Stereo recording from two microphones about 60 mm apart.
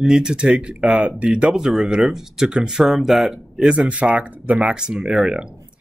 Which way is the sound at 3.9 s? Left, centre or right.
Right.